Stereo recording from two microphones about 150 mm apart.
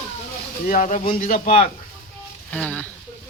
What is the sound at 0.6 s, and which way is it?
Speech, 60° left (ahead or behind).